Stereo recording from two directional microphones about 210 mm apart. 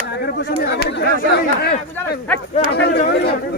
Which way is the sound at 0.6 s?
50° left (ahead or behind).